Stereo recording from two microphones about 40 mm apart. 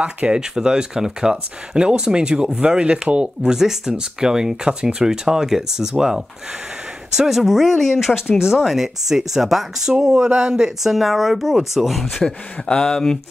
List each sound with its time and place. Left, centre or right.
0.0 s speech: right
0.4 s speech: centre
3.5 s speech: centre
10.8 s speech: centre
12.2 s speech: centre